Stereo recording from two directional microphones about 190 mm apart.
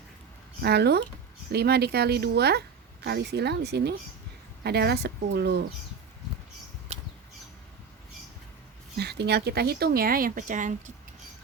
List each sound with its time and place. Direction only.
0.6 s speech: 60° right (ahead or behind)
6.9 s a sound: 35° right (ahead or behind)
9.0 s speech: 60° right (ahead or behind); by 10.9 s 40° right (ahead or behind)